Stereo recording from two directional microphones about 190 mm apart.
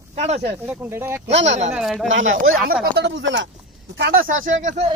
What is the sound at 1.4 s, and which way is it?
Speech, 35° right (ahead or behind).